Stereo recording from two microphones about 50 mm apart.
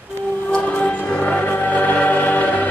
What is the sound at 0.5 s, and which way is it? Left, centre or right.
Music, centre.